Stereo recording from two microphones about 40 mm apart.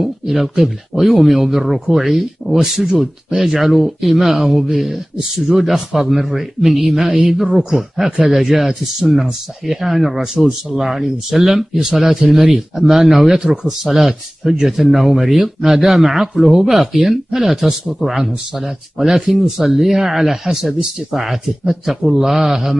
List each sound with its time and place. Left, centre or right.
0.0 s a man's voice: centre
10.3 s speech: centre
10.9 s a man's voice: centre
19.4 s speech: centre